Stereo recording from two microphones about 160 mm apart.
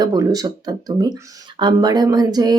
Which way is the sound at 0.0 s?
25° right (ahead or behind).